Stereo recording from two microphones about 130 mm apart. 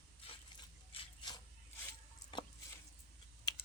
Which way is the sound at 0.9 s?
45° left (ahead or behind).